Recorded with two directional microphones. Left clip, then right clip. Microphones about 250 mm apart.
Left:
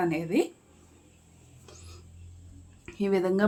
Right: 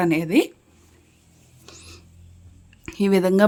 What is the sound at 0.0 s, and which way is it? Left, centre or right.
Speech, right.